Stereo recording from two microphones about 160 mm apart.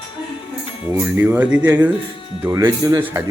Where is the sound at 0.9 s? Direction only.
15° right (ahead or behind).